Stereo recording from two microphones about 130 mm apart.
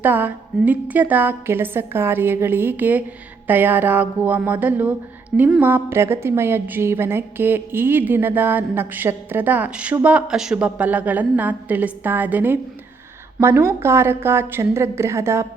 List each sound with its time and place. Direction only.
0.0 s a woman's voice: 15° right (ahead or behind)